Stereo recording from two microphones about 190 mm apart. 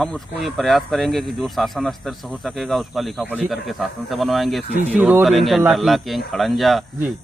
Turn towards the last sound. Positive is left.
turn(degrees=0)  # may be behind; listen again after turning